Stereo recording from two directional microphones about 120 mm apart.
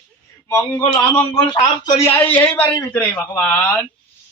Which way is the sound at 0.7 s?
15° left (ahead or behind).